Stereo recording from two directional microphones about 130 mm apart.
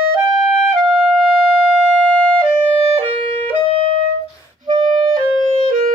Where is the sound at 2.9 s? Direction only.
45° right (ahead or behind).